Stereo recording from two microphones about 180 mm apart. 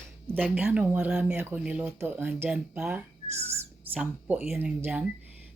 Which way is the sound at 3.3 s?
35° right (ahead or behind).